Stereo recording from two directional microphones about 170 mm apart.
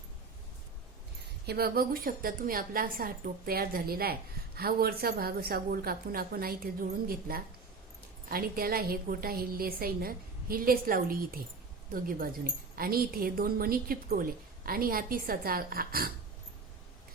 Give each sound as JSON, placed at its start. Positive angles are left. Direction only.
{"t": 1.5, "sound": "a woman's voice", "side_deg": -65}
{"t": 12.7, "sound": "a woman's voice", "side_deg": -60}